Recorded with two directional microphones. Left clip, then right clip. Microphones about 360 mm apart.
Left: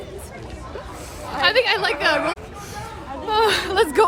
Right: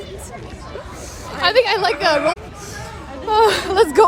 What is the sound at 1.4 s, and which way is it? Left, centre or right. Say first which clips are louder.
Speech: right 3 dB; centre.